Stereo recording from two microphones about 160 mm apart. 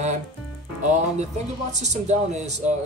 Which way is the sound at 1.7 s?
45° right (ahead or behind).